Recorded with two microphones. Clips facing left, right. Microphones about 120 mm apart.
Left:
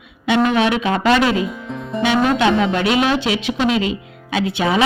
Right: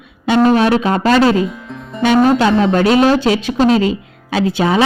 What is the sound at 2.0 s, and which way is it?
Speech, 40° right (ahead or behind).